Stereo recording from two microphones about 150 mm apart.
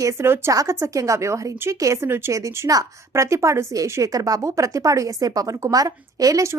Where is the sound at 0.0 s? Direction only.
20° right (ahead or behind).